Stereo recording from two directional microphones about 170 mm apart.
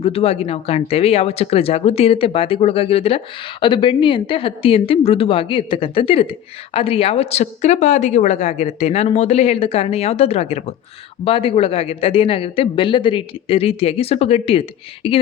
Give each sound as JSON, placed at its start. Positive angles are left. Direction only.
{"t": 0.0, "sound": "a woman's voice", "side_deg": 35}